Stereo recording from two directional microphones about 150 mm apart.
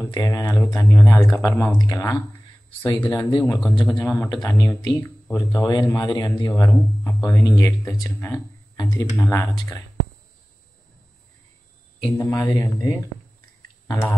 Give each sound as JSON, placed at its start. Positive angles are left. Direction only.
{"t": 0.0, "sound": "speech", "side_deg": 20}
{"t": 3.6, "sound": "speech", "side_deg": 0}
{"t": 4.3, "sound": "speech", "side_deg": 25}
{"t": 8.7, "sound": "a sound", "side_deg": 25}
{"t": 9.2, "sound": "speech", "side_deg": 20}
{"t": 12.2, "sound": "speech", "side_deg": 20}